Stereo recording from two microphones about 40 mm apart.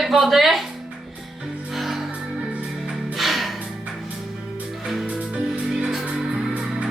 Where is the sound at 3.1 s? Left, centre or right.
Centre.